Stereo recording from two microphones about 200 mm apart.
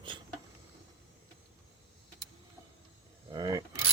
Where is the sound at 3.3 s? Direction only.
20° right (ahead or behind).